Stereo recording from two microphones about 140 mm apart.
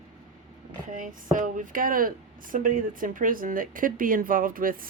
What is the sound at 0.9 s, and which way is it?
Speech, 70° right (ahead or behind).